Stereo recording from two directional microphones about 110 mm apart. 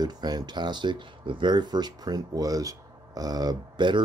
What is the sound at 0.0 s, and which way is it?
Speech, 40° right (ahead or behind).